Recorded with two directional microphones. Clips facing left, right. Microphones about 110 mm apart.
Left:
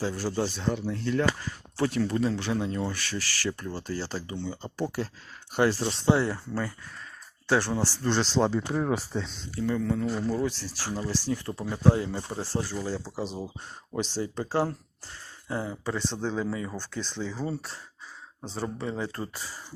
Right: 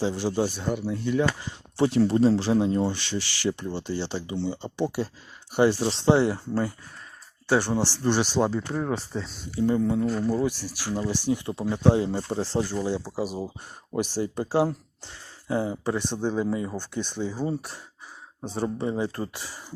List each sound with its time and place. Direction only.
0.0 s speech: 25° right (ahead or behind)
0.3 s speech: 10° right (ahead or behind)
1.4 s speech: 20° right (ahead or behind)
5.5 s speech: 10° right (ahead or behind)
5.9 s speech: 25° right (ahead or behind)
7.4 s speech: 10° right (ahead or behind)
9.6 s speech: 20° right (ahead or behind)
10.0 s speech: centre (ahead or behind); by 12.6 s 25° right (ahead or behind)
13.1 s speech: 5° right (ahead or behind)
19.2 s speech: 5° right (ahead or behind)